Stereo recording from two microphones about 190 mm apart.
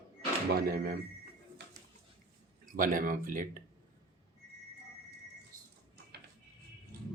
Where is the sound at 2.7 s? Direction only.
45° right (ahead or behind).